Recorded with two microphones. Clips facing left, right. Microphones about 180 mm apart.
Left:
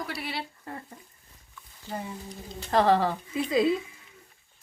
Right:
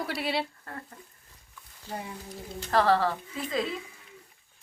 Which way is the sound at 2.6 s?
20° left (ahead or behind).